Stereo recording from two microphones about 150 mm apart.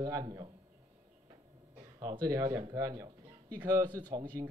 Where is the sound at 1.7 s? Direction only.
30° right (ahead or behind).